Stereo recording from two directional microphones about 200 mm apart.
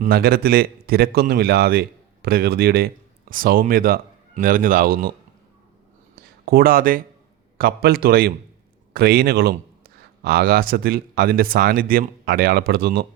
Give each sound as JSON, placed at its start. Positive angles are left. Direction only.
{"t": 0.0, "sound": "a man's voice", "side_deg": -50}
{"t": 6.4, "sound": "speech", "side_deg": -50}